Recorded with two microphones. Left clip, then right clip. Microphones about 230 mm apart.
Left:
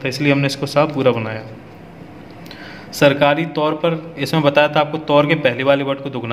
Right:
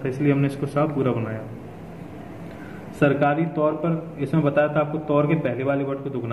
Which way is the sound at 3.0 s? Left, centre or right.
Left.